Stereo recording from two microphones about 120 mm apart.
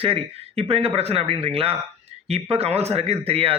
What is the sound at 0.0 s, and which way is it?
A man's voice, 55° right (ahead or behind).